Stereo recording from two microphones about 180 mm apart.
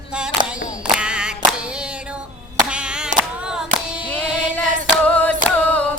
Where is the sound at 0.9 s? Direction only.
5° right (ahead or behind).